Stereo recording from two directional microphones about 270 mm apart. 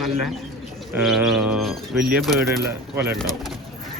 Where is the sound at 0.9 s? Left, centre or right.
Centre.